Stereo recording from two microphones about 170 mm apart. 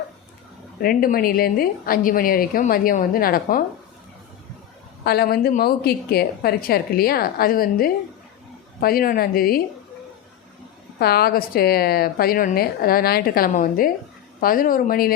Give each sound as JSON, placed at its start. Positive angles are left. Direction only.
{"t": 0.8, "sound": "a woman's voice", "side_deg": 60}
{"t": 5.0, "sound": "a woman's voice", "side_deg": 65}
{"t": 11.0, "sound": "a woman's voice", "side_deg": 65}